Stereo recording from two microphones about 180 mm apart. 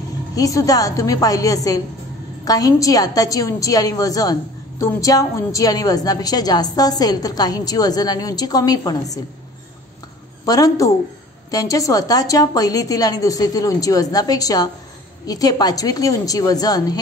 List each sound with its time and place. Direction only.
0.4 s a woman's voice: 20° left (ahead or behind)
10.4 s a woman's voice: 20° left (ahead or behind)